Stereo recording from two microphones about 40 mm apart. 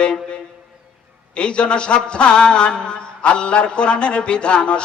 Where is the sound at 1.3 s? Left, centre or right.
Left.